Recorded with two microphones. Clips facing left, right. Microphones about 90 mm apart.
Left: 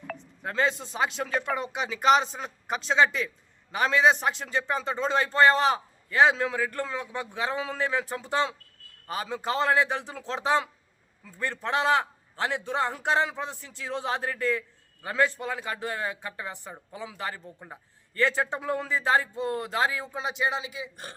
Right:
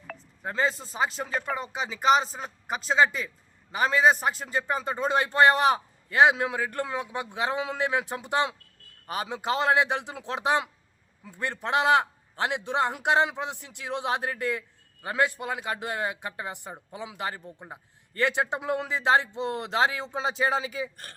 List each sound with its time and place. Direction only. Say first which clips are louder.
0.6 s speech: even; centre (ahead or behind)
4.2 s a man's voice: even; 5° right (ahead or behind); by 20.9 s 40° right (ahead or behind)